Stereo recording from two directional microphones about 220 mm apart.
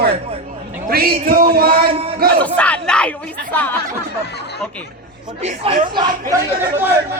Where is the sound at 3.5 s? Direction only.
10° left (ahead or behind).